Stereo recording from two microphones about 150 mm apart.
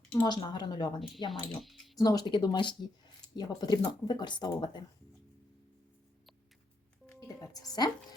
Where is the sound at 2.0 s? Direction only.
25° left (ahead or behind).